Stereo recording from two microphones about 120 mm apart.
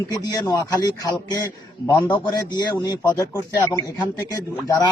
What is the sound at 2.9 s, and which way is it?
Speech, 30° left (ahead or behind).